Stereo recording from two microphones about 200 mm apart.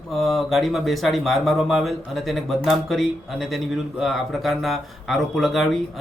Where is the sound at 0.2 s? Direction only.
Centre (ahead or behind).